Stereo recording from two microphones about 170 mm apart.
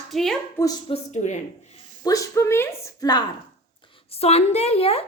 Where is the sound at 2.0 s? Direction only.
20° left (ahead or behind).